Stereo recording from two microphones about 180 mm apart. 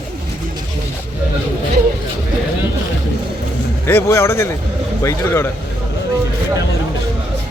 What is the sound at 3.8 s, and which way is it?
A man's voice, 15° left (ahead or behind).